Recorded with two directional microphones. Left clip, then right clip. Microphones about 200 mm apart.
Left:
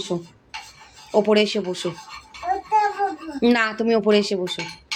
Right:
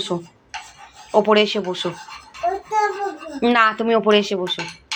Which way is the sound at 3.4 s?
15° left (ahead or behind).